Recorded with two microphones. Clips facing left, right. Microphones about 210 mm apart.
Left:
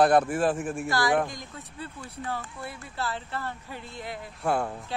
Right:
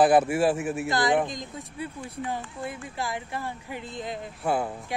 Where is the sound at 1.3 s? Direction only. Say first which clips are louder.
Right 4 dB; 15° right (ahead or behind).